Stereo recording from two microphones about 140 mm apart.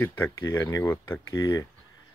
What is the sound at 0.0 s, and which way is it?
Speech, 15° left (ahead or behind).